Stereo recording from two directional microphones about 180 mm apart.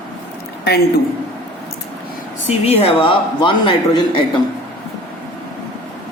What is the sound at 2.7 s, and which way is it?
Speech, 30° left (ahead or behind).